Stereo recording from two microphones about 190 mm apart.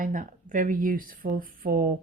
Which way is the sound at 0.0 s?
45° right (ahead or behind).